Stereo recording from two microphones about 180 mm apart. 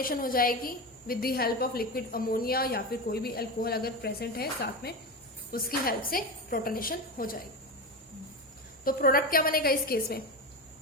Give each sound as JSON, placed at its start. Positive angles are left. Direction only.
{"t": 0.0, "sound": "a woman's voice", "side_deg": 55}
{"t": 8.8, "sound": "a woman's voice", "side_deg": 55}